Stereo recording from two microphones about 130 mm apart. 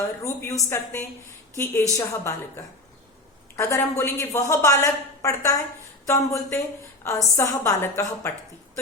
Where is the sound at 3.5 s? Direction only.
25° left (ahead or behind).